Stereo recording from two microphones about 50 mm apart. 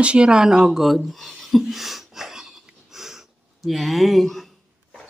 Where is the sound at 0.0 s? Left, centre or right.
Right; by 1.6 s centre.